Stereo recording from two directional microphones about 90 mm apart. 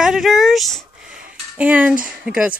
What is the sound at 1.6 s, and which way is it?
Speech, 15° right (ahead or behind).